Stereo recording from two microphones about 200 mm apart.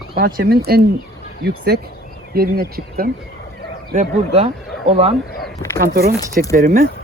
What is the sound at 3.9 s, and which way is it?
Speech, 35° right (ahead or behind).